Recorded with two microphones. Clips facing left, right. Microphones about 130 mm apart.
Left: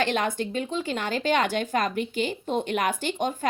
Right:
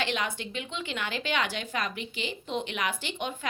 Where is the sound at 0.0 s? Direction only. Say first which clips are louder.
Left 6 dB; 45° left (ahead or behind).